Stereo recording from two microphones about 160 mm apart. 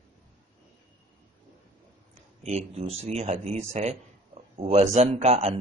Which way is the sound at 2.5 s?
40° right (ahead or behind).